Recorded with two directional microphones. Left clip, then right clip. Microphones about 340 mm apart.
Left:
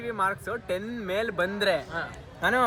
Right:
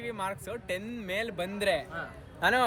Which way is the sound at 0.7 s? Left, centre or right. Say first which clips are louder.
Left 4 dB; centre.